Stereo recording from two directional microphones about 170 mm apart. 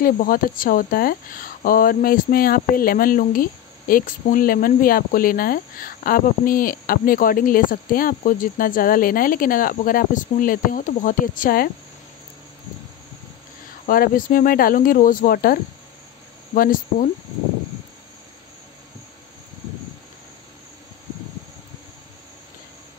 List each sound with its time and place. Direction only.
0.0 s speech: 55° left (ahead or behind)
13.8 s speech: 55° left (ahead or behind)